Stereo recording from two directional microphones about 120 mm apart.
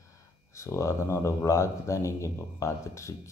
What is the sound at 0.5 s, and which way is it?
Speech, 25° left (ahead or behind).